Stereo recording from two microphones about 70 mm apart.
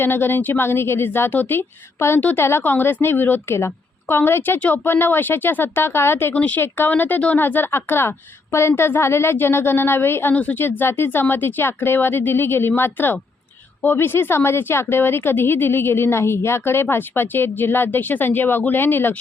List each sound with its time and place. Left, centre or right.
0.0 s a woman's voice: left
6.3 s speech: left
6.6 s a woman's voice: left
10.3 s a woman's voice: left